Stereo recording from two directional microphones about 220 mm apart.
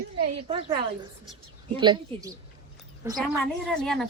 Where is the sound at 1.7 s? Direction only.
20° right (ahead or behind).